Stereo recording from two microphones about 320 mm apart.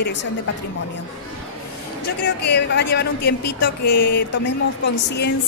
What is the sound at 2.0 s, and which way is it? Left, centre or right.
A woman's voice, left.